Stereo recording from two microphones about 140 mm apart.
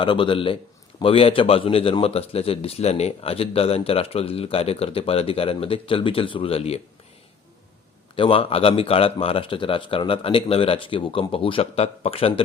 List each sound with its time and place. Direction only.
0.0 s a man's voice: 35° left (ahead or behind)
8.1 s a man's voice: 40° left (ahead or behind)